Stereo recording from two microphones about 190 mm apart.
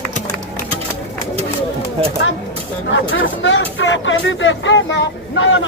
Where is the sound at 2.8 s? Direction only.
75° left (ahead or behind).